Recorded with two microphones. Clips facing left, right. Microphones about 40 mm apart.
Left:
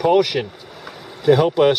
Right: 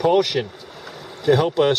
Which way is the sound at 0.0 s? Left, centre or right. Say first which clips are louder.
Left 2 dB; centre.